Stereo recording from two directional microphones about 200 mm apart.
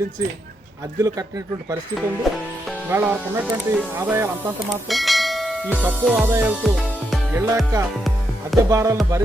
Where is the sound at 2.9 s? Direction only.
10° right (ahead or behind).